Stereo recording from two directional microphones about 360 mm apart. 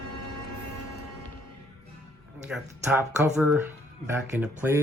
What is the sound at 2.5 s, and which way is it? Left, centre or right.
Speech, centre.